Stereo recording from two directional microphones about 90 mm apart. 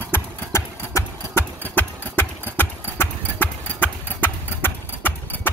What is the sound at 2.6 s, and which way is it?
Clip-clop, 20° left (ahead or behind).